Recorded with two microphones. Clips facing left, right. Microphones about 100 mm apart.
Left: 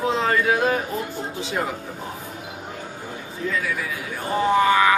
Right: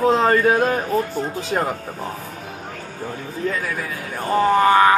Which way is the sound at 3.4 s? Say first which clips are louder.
Right 1 dB; 50° right (ahead or behind).